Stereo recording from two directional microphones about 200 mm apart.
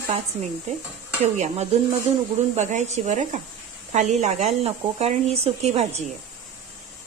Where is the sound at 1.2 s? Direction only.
35° right (ahead or behind).